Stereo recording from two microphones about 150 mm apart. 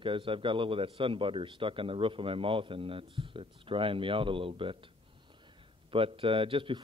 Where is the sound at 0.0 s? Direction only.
35° right (ahead or behind).